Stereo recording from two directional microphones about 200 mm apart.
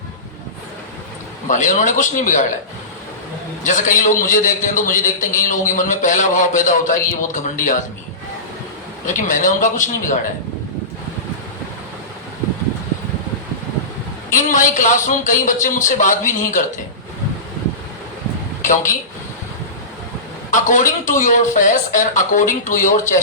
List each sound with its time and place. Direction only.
1.5 s a man's voice: 40° left (ahead or behind)
3.6 s a man's voice: 40° left (ahead or behind)
9.0 s a man's voice: 40° left (ahead or behind)
14.3 s a man's voice: 40° left (ahead or behind)
18.6 s speech: 40° left (ahead or behind)
20.5 s a man's voice: 40° left (ahead or behind)